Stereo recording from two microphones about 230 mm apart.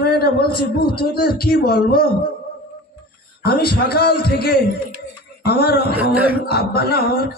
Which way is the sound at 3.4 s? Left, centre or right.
Left.